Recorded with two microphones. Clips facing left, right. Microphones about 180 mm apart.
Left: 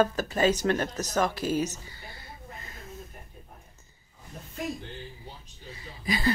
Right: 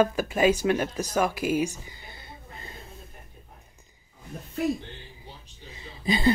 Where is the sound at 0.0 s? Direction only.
10° right (ahead or behind).